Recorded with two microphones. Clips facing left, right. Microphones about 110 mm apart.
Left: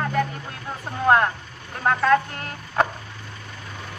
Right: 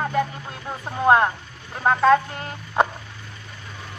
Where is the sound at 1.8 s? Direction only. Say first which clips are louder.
Right 2 dB; 20° right (ahead or behind).